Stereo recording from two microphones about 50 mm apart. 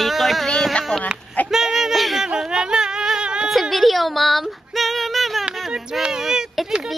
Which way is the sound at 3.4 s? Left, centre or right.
Centre.